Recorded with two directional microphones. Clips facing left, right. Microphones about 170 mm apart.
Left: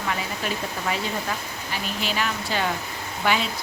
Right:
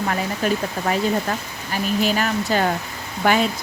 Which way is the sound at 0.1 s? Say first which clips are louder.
Right 5 dB; 45° right (ahead or behind).